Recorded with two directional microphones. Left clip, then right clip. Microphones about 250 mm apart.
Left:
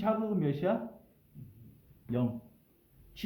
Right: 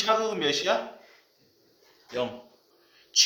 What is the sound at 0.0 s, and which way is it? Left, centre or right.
Speech, right.